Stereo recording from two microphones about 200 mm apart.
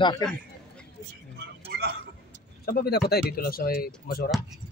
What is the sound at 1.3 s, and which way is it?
Vehicle, 55° right (ahead or behind).